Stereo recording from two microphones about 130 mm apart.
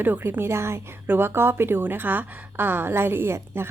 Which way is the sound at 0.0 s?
15° right (ahead or behind).